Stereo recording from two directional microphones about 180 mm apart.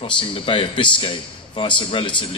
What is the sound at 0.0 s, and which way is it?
Speech, 30° left (ahead or behind).